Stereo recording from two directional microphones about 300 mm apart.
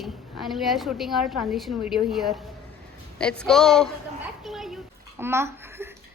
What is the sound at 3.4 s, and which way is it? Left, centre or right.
Speech, centre.